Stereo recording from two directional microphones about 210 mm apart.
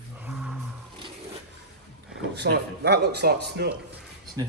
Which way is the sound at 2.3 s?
50° right (ahead or behind).